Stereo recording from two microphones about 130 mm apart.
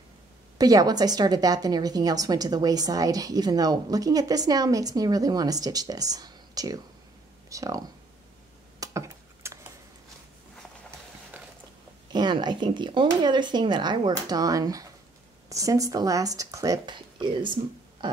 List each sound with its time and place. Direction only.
0.6 s a woman's voice: 30° right (ahead or behind)
8.7 s a sound: 25° right (ahead or behind)
12.1 s a woman's voice: 35° right (ahead or behind)